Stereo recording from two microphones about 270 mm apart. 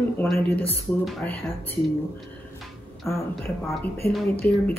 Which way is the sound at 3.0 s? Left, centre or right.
Centre.